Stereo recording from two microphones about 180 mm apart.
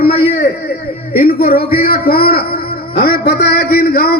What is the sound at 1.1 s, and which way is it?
A man's voice, 55° left (ahead or behind).